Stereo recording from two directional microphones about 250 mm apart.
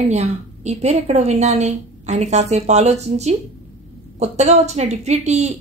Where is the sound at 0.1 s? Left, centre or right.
Right.